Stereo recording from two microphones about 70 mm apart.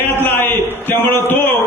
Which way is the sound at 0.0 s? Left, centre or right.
Left.